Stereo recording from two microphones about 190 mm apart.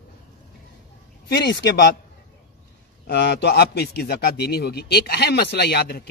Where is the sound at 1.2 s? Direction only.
60° left (ahead or behind).